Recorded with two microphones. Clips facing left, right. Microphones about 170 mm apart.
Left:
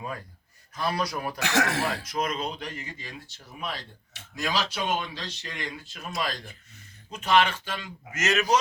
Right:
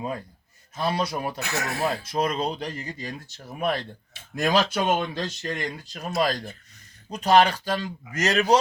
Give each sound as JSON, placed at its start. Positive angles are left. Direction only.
{"t": 0.8, "sound": "a man's voice", "side_deg": -25}
{"t": 1.4, "sound": "speech", "side_deg": 90}
{"t": 2.0, "sound": "speech", "side_deg": -30}